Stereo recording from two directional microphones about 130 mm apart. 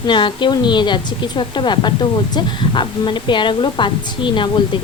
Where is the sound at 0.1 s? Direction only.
40° left (ahead or behind).